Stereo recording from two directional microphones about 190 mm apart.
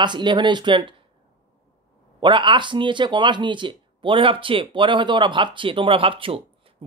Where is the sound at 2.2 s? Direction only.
25° right (ahead or behind).